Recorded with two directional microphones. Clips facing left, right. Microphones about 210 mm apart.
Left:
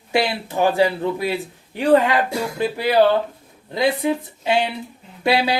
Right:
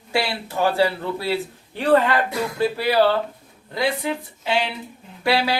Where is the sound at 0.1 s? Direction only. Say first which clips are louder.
Left 3 dB; 20° left (ahead or behind).